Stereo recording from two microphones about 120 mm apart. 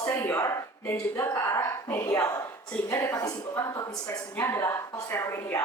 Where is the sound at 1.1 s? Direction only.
25° left (ahead or behind).